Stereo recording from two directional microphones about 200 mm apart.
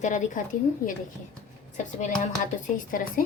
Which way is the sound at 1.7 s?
40° left (ahead or behind).